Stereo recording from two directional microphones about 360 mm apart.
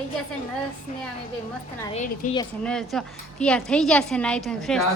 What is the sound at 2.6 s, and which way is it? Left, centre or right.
A woman's voice, centre.